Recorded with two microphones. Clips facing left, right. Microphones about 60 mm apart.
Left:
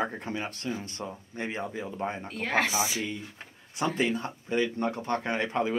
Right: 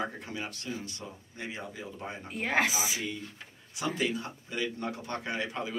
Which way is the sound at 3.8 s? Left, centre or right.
Left.